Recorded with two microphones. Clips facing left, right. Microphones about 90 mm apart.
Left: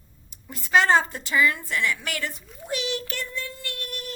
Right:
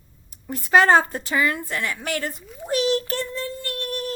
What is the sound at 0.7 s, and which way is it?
A woman's voice, 45° right (ahead or behind).